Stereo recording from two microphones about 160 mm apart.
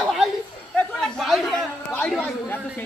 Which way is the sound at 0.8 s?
5° left (ahead or behind).